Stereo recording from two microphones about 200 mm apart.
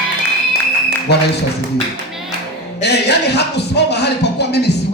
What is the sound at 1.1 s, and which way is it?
Music, 55° left (ahead or behind).